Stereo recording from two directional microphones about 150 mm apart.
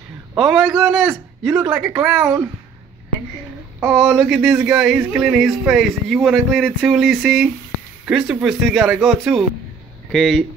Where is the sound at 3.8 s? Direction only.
5° right (ahead or behind).